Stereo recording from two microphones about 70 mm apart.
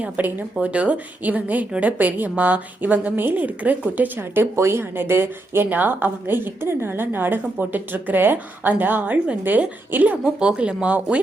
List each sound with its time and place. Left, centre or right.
0.0 s a woman's voice: right